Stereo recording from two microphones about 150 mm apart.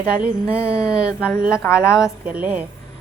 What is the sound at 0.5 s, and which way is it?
A woman's voice, 5° right (ahead or behind).